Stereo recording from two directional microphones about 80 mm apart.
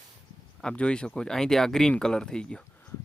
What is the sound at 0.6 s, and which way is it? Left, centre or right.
Speech, centre.